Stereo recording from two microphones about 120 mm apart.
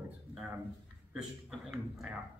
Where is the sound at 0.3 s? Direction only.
10° right (ahead or behind).